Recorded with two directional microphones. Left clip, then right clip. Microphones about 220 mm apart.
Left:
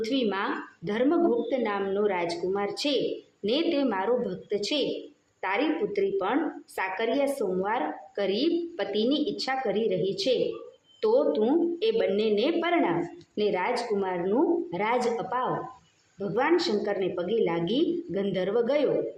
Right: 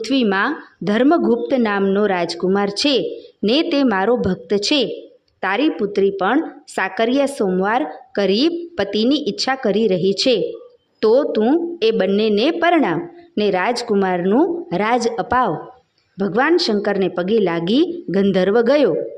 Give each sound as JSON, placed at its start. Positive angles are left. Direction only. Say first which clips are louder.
{"t": 0.0, "sound": "a woman's voice", "louder": "right 10 dB", "side_deg": -50}